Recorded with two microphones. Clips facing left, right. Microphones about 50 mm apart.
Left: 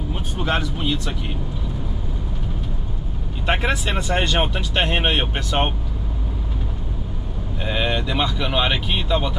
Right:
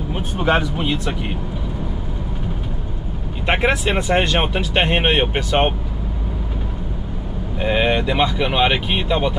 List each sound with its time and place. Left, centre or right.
0.1 s speech: centre
3.4 s speech: centre
7.5 s speech: right